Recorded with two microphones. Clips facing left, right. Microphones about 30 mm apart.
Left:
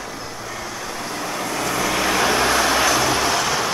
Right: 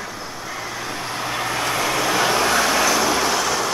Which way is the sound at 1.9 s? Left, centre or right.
Centre.